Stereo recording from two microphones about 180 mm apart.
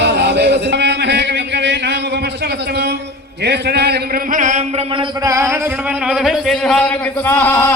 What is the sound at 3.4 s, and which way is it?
Speech, 65° right (ahead or behind).